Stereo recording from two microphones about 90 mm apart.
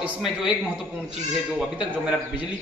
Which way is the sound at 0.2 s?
5° right (ahead or behind).